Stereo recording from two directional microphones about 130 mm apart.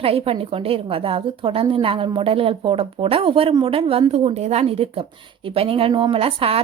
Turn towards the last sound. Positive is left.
turn(degrees=-45)  # may be behind; listen again after turning